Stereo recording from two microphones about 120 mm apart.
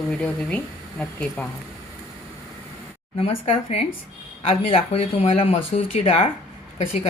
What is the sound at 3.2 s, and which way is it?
A woman's voice, 55° left (ahead or behind).